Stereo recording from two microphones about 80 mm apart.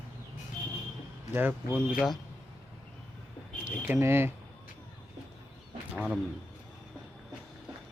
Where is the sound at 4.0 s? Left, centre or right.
Right.